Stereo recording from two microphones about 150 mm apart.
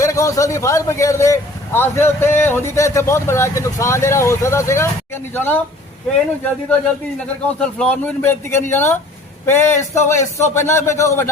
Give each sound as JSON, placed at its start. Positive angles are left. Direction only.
{"t": 0.0, "sound": "a man's voice", "side_deg": 20}
{"t": 7.4, "sound": "speech", "side_deg": 10}